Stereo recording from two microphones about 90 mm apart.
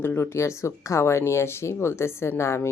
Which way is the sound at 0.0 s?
25° left (ahead or behind).